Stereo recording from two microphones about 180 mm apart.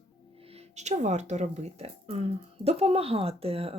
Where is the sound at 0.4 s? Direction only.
35° right (ahead or behind).